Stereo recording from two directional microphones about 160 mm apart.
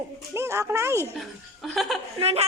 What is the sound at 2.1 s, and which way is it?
Speech, 40° right (ahead or behind).